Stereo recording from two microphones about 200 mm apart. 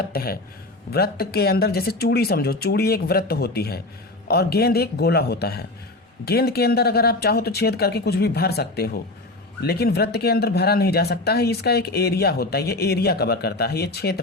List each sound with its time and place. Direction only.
0.1 s speech: 50° left (ahead or behind)